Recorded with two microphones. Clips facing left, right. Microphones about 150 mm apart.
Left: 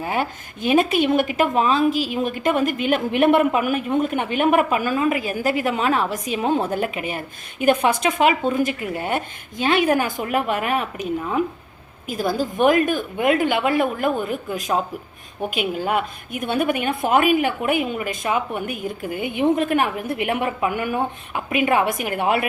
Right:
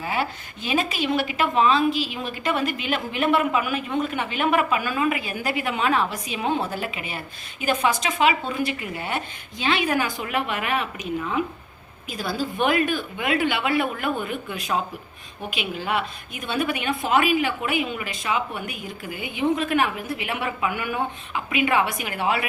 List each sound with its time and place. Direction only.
0.0 s a woman's voice: 50° left (ahead or behind)